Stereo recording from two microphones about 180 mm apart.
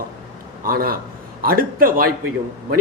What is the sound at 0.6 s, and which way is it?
A man's voice, 55° right (ahead or behind).